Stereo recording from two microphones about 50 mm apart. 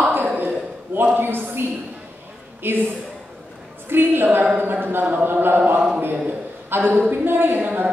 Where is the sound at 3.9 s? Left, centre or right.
Right.